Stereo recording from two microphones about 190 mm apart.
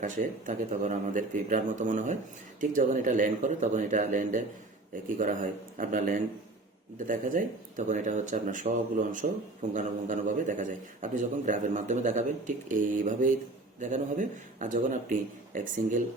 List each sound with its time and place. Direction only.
0.0 s a man's voice: 40° right (ahead or behind)